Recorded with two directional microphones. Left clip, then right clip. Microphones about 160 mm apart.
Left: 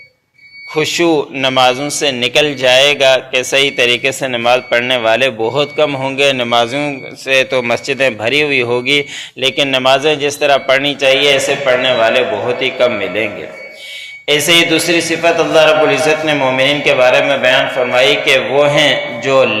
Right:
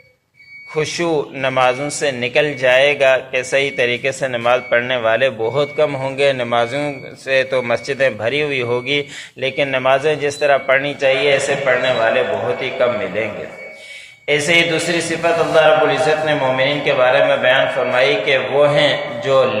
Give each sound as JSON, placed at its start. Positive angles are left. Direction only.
{"t": 0.8, "sound": "a man's voice", "side_deg": 25}
{"t": 14.3, "sound": "a man's voice", "side_deg": 30}